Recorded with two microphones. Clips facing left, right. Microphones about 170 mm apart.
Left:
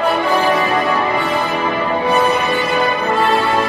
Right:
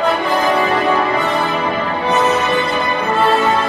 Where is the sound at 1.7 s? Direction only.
15° left (ahead or behind).